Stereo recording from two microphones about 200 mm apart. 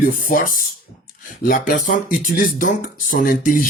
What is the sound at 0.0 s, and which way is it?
Speech, 45° left (ahead or behind).